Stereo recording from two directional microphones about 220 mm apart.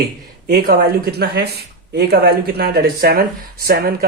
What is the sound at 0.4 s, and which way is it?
Speech, 45° right (ahead or behind).